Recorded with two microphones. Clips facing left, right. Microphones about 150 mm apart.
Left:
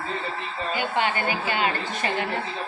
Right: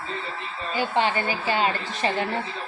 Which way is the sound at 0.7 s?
30° right (ahead or behind).